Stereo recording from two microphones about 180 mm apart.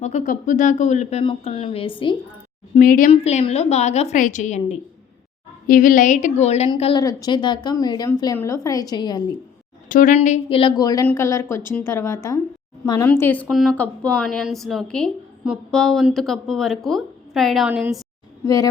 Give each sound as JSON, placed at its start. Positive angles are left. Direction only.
{"t": 0.0, "sound": "a woman's voice", "side_deg": 45}
{"t": 1.2, "sound": "a woman's voice", "side_deg": 30}
{"t": 2.7, "sound": "a woman's voice", "side_deg": 50}
{"t": 3.1, "sound": "a woman's voice", "side_deg": 35}
{"t": 9.9, "sound": "a woman's voice", "side_deg": 45}
{"t": 18.4, "sound": "a woman's voice", "side_deg": 20}